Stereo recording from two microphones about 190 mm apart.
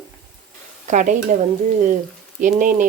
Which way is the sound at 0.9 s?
40° right (ahead or behind).